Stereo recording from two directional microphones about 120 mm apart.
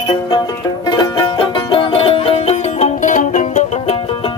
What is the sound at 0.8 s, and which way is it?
Music, 35° left (ahead or behind).